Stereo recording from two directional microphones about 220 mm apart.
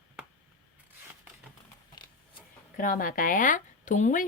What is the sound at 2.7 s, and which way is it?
Speech, 40° left (ahead or behind).